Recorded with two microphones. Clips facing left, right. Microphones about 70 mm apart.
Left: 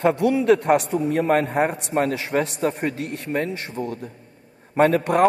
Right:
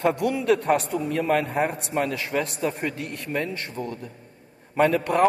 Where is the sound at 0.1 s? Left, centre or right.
Left.